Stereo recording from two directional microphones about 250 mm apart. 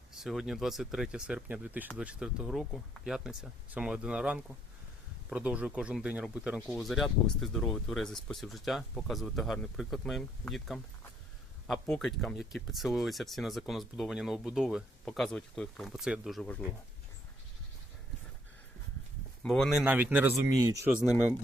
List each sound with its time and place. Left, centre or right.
0.1 s speech: centre
19.4 s speech: centre